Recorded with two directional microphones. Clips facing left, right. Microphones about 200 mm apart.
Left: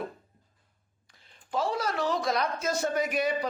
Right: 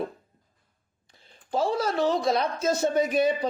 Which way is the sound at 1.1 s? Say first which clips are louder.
Right 4 dB; 30° right (ahead or behind).